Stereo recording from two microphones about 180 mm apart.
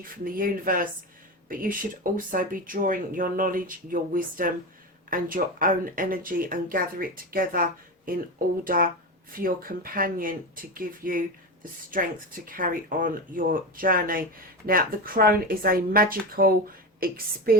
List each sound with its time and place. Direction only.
0.0 s a woman's voice: 50° right (ahead or behind)